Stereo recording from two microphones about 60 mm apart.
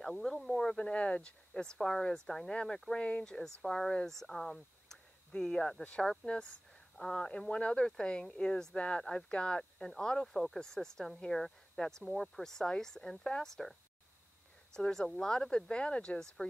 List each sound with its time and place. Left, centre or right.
0.0 s speech: centre